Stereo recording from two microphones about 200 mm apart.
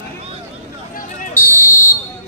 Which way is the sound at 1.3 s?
10° left (ahead or behind).